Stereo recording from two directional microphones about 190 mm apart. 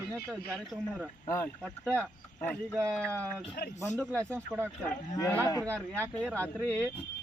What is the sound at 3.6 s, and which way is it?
Speech, 50° left (ahead or behind).